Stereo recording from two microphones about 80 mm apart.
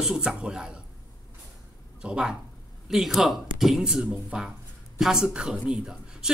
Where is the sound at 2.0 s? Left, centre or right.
Centre.